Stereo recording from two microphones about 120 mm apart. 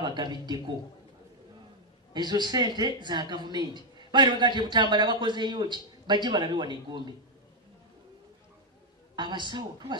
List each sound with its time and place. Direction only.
0.0 s speech: 40° right (ahead or behind)
2.1 s speech: 35° right (ahead or behind)
9.1 s speech: 40° right (ahead or behind)